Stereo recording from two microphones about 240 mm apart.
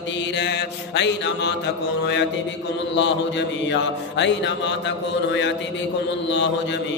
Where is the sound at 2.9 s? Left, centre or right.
Left.